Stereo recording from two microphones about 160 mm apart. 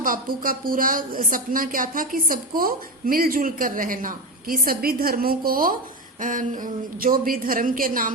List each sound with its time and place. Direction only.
0.0 s a woman's voice: 60° right (ahead or behind)